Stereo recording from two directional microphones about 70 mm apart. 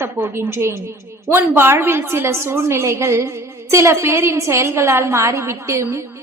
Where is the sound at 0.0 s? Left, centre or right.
Right.